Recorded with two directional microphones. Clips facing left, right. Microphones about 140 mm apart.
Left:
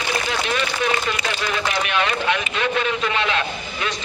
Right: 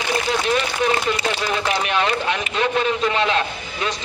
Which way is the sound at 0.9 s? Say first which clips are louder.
Right 3 dB; 35° right (ahead or behind).